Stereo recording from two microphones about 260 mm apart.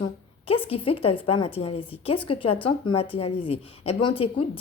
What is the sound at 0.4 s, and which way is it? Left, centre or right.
Speech, left.